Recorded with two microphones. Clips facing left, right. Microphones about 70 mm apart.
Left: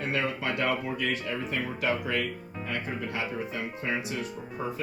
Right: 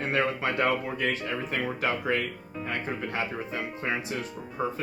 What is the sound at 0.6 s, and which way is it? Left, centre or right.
Speech, right.